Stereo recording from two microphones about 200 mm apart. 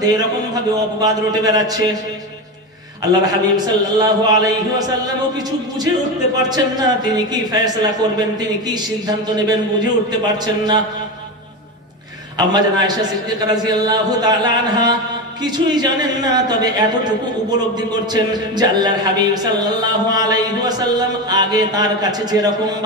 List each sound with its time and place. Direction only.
0.0 s speech: 20° right (ahead or behind)
3.1 s speech: 20° right (ahead or behind)
6.5 s speech: 20° right (ahead or behind)
12.4 s speech: 20° right (ahead or behind)